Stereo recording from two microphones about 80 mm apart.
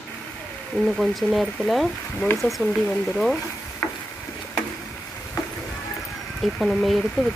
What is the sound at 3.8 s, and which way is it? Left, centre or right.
Stir, left.